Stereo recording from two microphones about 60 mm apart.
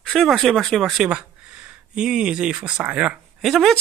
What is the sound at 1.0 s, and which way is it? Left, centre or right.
Speech, centre.